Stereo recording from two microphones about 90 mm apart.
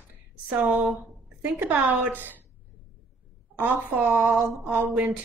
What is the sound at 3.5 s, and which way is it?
A woman's voice, 20° right (ahead or behind).